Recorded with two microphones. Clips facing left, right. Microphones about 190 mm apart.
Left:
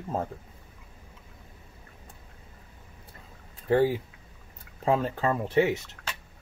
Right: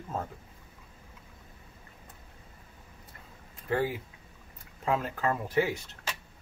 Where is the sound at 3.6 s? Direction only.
30° left (ahead or behind).